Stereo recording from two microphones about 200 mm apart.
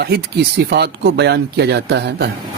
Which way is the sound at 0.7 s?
55° right (ahead or behind).